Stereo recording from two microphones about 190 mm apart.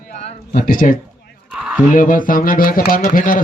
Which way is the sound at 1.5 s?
5° right (ahead or behind).